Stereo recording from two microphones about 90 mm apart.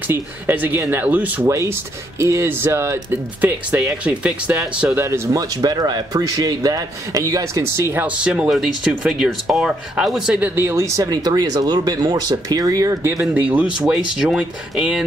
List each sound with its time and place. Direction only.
0.1 s speech: 25° right (ahead or behind)
1.5 s speech: 30° right (ahead or behind)
3.3 s speech: 15° right (ahead or behind)
4.9 s speech: 30° right (ahead or behind)
8.2 s speech: 10° right (ahead or behind)
10.4 s speech: 30° right (ahead or behind)
11.1 s speech: 50° right (ahead or behind)
13.0 s speech: 30° right (ahead or behind)
13.3 s speech: 20° right (ahead or behind)